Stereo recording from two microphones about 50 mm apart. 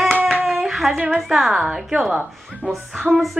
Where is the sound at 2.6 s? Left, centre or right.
Right.